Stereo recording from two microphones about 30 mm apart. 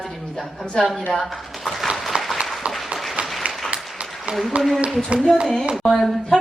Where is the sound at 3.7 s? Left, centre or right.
Right.